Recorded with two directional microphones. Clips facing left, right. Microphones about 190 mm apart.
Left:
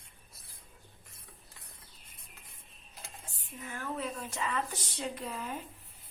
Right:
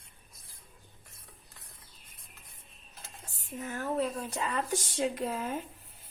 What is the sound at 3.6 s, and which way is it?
Speech, 40° right (ahead or behind).